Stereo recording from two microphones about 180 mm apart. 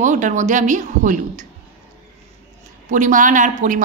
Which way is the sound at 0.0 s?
45° right (ahead or behind).